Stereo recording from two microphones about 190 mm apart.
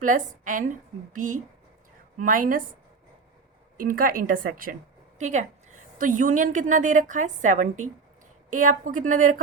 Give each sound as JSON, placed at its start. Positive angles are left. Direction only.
{"t": 0.0, "sound": "a woman's voice", "side_deg": -45}
{"t": 3.8, "sound": "a woman's voice", "side_deg": -50}